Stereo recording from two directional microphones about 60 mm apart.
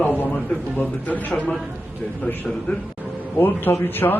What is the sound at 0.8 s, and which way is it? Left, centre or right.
Speech, left.